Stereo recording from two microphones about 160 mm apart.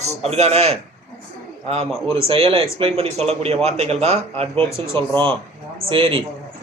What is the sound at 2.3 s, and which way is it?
A man's voice, 35° right (ahead or behind).